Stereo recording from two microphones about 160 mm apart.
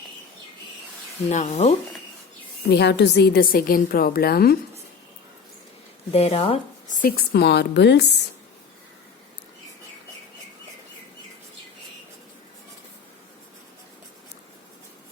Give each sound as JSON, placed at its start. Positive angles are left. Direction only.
{"t": 1.3, "sound": "speech", "side_deg": 45}
{"t": 2.6, "sound": "a woman's voice", "side_deg": 90}
{"t": 6.1, "sound": "speech", "side_deg": 40}
{"t": 7.0, "sound": "speech", "side_deg": 90}